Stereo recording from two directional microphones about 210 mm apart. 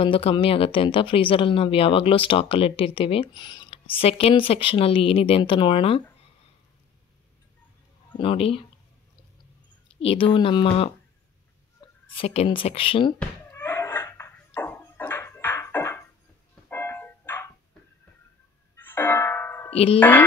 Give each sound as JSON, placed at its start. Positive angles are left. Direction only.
{"t": 0.0, "sound": "speech", "side_deg": 25}
{"t": 8.2, "sound": "speech", "side_deg": 25}
{"t": 9.9, "sound": "speech", "side_deg": 25}
{"t": 12.1, "sound": "speech", "side_deg": 30}
{"t": 13.2, "sound": "a sound", "side_deg": 10}
{"t": 16.6, "sound": "music", "side_deg": 10}
{"t": 18.8, "sound": "music", "side_deg": 10}
{"t": 19.7, "sound": "speech", "side_deg": 25}
{"t": 20.0, "sound": "speech", "side_deg": 10}